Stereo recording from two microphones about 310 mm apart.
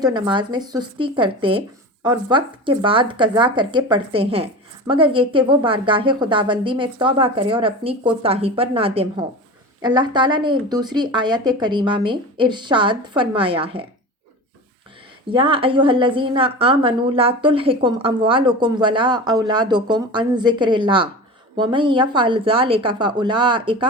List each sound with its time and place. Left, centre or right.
0.0 s a woman's voice: centre
15.3 s a woman's voice: centre